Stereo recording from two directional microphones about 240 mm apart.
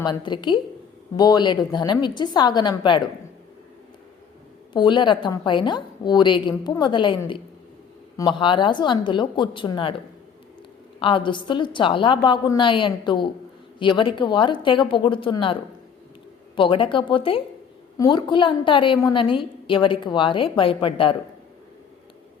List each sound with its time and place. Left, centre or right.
0.0 s a woman's voice: centre
4.7 s a woman's voice: centre
11.0 s a woman's voice: centre
16.6 s a woman's voice: left